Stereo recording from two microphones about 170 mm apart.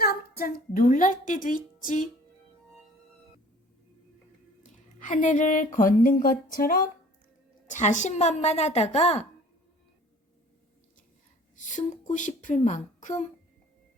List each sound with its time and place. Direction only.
0.0 s a woman's voice: 60° left (ahead or behind)
4.6 s speech: 50° left (ahead or behind)
7.7 s a woman's voice: 45° left (ahead or behind)
11.5 s a woman's voice: 50° left (ahead or behind)